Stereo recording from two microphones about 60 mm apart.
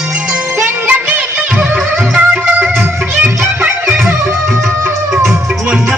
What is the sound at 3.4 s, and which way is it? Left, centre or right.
Music, right.